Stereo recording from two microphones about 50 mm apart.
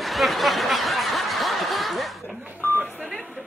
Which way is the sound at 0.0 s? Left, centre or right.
Centre.